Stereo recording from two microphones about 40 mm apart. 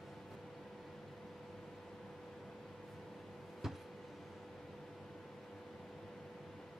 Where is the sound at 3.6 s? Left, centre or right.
Centre.